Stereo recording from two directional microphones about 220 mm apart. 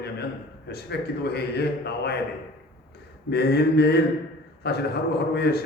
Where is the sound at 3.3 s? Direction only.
45° left (ahead or behind).